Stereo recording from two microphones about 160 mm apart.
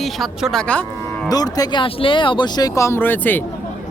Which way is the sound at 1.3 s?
25° left (ahead or behind).